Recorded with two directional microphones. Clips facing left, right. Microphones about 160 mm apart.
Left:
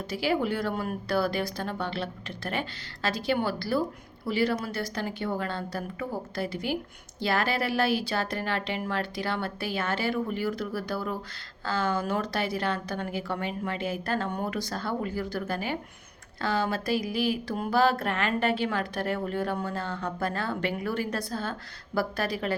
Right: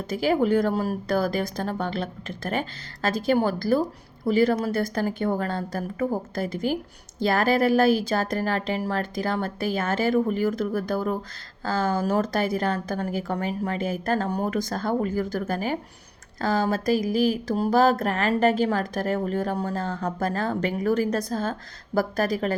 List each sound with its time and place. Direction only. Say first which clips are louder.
0.1 s speech: right 6 dB; 45° right (ahead or behind)
16.4 s a sound: right 4 dB; 40° right (ahead or behind)
21.9 s speech: right 5 dB; 45° right (ahead or behind)